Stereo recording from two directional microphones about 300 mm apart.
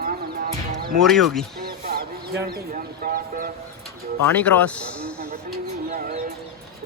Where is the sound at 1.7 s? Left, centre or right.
Right.